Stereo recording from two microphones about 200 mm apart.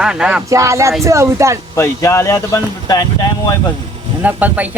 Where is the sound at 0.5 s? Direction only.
15° right (ahead or behind).